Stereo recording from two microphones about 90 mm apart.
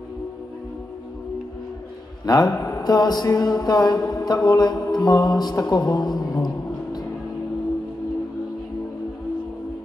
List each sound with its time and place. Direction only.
2.2 s a man's voice: 50° left (ahead or behind)
2.8 s mantra: 50° left (ahead or behind)